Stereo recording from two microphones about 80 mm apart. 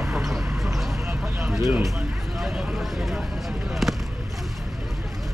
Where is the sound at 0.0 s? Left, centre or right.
Centre.